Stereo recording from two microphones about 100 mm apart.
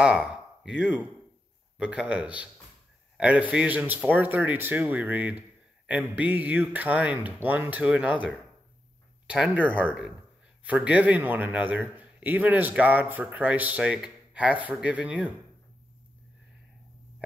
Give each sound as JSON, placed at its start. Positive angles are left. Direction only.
{"t": 0.0, "sound": "a man's voice", "side_deg": -10}
{"t": 9.3, "sound": "a man's voice", "side_deg": -15}